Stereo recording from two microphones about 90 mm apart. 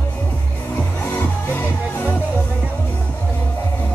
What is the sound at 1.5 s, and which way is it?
Music, 20° left (ahead or behind).